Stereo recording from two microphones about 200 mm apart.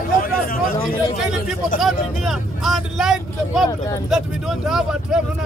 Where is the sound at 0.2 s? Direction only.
45° left (ahead or behind).